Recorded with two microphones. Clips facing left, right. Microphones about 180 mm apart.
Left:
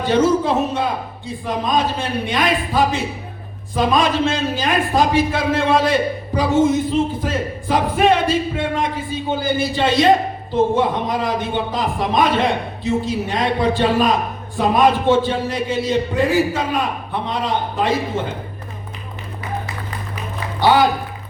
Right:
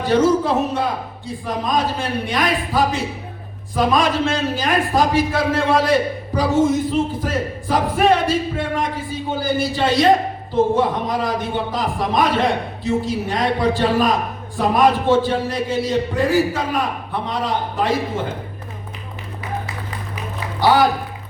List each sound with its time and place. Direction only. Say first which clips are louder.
0.0 s a man's voice: even; 25° left (ahead or behind)
20.6 s a man's voice: left 1 dB; 25° left (ahead or behind)